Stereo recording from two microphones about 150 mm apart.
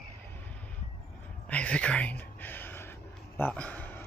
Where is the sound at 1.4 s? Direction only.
10° left (ahead or behind).